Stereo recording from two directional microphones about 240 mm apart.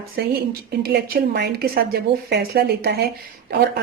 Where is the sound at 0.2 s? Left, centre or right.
Right.